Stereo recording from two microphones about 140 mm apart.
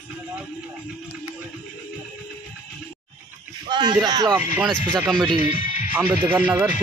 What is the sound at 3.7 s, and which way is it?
Speech, 30° right (ahead or behind).